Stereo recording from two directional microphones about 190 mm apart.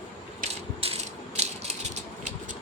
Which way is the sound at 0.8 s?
30° right (ahead or behind).